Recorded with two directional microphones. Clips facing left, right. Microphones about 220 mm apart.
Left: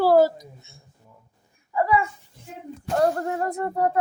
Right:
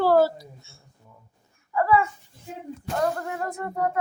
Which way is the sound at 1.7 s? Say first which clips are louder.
Right 1 dB; 20° left (ahead or behind).